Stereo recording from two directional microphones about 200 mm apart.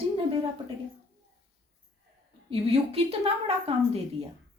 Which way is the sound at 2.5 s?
30° right (ahead or behind).